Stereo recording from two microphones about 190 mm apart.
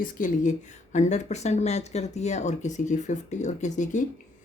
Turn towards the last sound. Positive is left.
turn(degrees=40)  # may be behind; listen again after turning